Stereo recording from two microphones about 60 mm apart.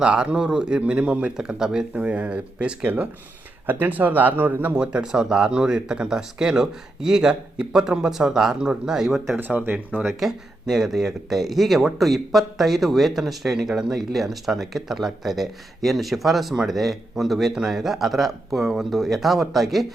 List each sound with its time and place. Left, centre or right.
0.0 s speech: centre
1.9 s speech: right
4.7 s speech: centre
9.4 s speech: right
10.2 s speech: centre